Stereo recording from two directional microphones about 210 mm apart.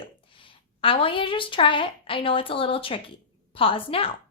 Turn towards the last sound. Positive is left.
turn(degrees=25)  # may be behind; listen again after turning